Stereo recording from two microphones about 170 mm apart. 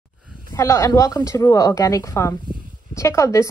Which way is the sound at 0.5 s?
20° left (ahead or behind).